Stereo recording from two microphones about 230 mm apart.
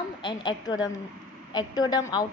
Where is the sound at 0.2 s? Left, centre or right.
Centre.